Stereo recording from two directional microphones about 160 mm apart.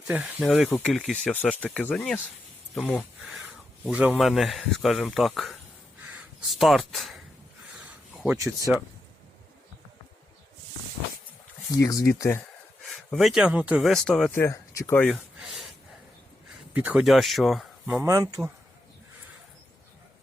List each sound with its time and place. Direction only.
0.1 s speech: 5° right (ahead or behind)
3.2 s a sound: 5° right (ahead or behind)
4.2 s speech: centre (ahead or behind)
7.9 s rub: 5° right (ahead or behind)
8.4 s speech: 20° right (ahead or behind)
11.7 s speech: 20° left (ahead or behind)
12.8 s speech: centre (ahead or behind)
14.4 s speech: 20° left (ahead or behind)
15.1 s a sound: 5° right (ahead or behind)
16.7 s speech: 10° right (ahead or behind)
17.8 s speech: 15° right (ahead or behind)